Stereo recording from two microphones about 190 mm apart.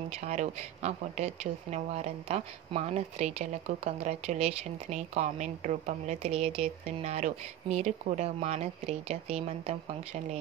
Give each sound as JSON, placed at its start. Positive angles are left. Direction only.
{"t": 0.2, "sound": "speech", "side_deg": -40}